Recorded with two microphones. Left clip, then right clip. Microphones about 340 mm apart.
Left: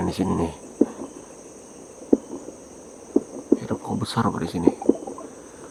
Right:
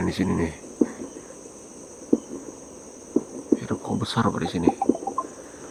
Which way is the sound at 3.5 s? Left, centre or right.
Centre.